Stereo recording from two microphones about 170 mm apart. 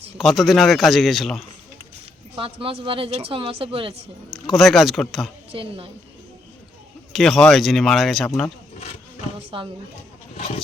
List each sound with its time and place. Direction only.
0.2 s a man's voice: centre (ahead or behind)
2.3 s speech: 30° right (ahead or behind)
4.3 s a man's voice: centre (ahead or behind)
5.5 s speech: 35° right (ahead or behind)
7.1 s a man's voice: centre (ahead or behind)
9.5 s speech: 30° right (ahead or behind)
10.3 s a sound: 40° left (ahead or behind)